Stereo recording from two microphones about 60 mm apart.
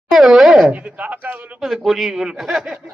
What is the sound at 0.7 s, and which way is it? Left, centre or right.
Speech, right.